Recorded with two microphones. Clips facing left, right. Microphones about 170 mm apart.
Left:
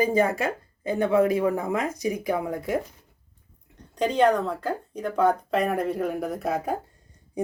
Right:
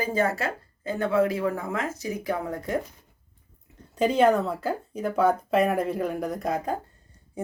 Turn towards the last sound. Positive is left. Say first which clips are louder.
# left 1 dB
turn(degrees=10)  # may be behind; listen again after turning